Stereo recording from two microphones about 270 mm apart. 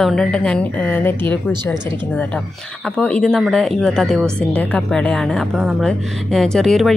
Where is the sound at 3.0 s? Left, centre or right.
Centre.